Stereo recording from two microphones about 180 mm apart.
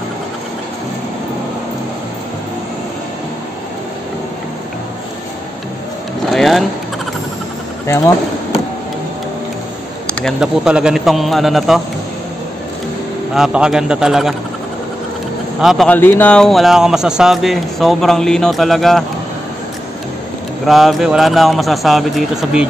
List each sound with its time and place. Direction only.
6.3 s vehicle: centre (ahead or behind)
7.8 s speech: 15° left (ahead or behind)
10.2 s a man's voice: 5° right (ahead or behind)
13.3 s a man's voice: 5° right (ahead or behind)
15.6 s a man's voice: centre (ahead or behind)
15.9 s a man's voice: 10° left (ahead or behind)
20.6 s a man's voice: centre (ahead or behind)